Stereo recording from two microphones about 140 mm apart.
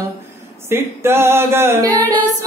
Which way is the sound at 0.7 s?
15° right (ahead or behind).